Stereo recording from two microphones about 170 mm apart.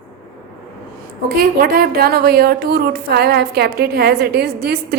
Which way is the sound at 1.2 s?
60° right (ahead or behind).